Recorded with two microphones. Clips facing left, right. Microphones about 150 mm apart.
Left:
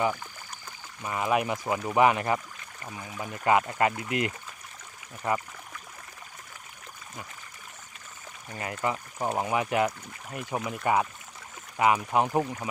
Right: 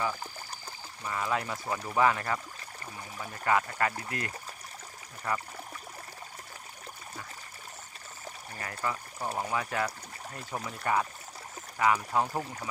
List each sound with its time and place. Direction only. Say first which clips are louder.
1.0 s speech: left 5 dB; 15° left (ahead or behind)
8.8 s speech: left 5 dB; 20° left (ahead or behind)